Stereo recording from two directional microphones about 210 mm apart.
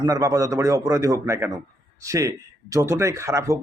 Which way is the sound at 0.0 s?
15° right (ahead or behind).